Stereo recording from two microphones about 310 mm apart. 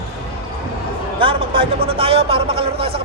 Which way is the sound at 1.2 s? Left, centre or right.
Centre.